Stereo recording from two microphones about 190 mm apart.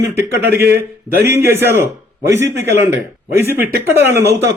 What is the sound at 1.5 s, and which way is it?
Speech, 10° right (ahead or behind).